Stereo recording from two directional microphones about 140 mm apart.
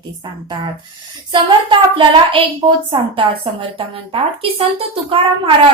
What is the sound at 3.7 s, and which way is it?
A woman's voice, 40° right (ahead or behind).